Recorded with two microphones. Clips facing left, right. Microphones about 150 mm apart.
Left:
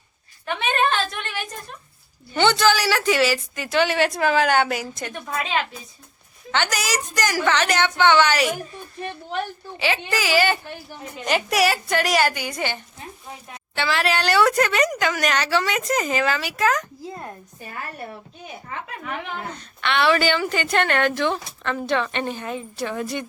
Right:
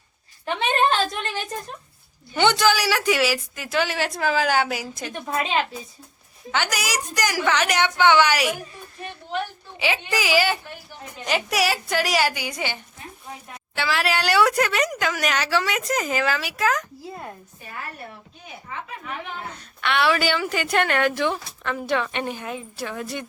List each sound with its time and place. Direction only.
0.4 s a sound: 30° right (ahead or behind)
2.3 s a woman's voice: 15° right (ahead or behind)
6.5 s a woman's voice: 10° right (ahead or behind)
9.7 s a woman's voice: 15° right (ahead or behind)
19.5 s a woman's voice: 5° right (ahead or behind)